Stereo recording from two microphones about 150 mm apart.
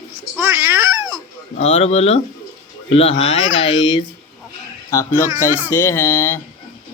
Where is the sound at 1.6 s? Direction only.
40° left (ahead or behind).